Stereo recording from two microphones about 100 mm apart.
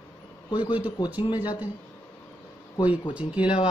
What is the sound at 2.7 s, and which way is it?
Speech, 50° left (ahead or behind).